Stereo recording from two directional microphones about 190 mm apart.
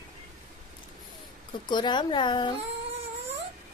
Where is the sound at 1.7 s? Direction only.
25° left (ahead or behind).